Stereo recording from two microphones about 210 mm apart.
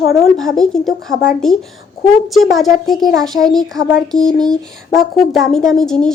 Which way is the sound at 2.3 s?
Centre (ahead or behind).